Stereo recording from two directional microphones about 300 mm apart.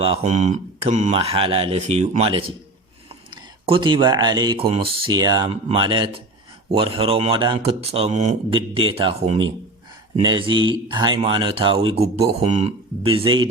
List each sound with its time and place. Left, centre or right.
0.0 s speech: centre
3.7 s speech: centre
10.5 s a man's voice: right
10.8 s speech: centre